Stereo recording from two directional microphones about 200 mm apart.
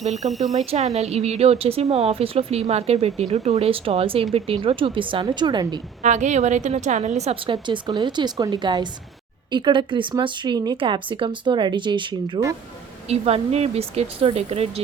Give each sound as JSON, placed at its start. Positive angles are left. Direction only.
{"t": 0.0, "sound": "speech", "side_deg": -35}
{"t": 0.3, "sound": "speech", "side_deg": 0}
{"t": 0.5, "sound": "speech", "side_deg": -30}
{"t": 6.0, "sound": "speech", "side_deg": -35}
{"t": 13.1, "sound": "speech", "side_deg": -30}